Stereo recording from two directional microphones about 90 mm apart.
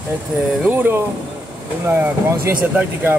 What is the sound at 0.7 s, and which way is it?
Speech, 25° right (ahead or behind).